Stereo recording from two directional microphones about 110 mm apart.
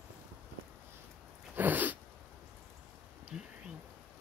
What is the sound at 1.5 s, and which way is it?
Sneeze, 15° right (ahead or behind).